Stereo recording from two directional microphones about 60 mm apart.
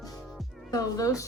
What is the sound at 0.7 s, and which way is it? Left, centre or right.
Speech, left.